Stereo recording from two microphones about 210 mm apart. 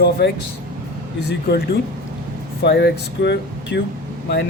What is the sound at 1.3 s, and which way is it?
Speech, 50° left (ahead or behind).